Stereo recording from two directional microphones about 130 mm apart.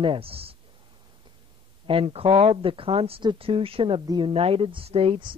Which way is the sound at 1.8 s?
45° right (ahead or behind).